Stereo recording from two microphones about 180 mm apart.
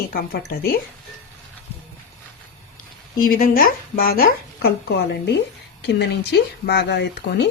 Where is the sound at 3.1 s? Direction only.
50° left (ahead or behind).